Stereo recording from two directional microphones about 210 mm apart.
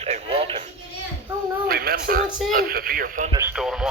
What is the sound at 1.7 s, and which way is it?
Speech, 45° right (ahead or behind).